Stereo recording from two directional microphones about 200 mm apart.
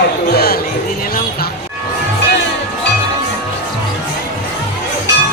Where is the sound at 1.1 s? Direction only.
45° left (ahead or behind).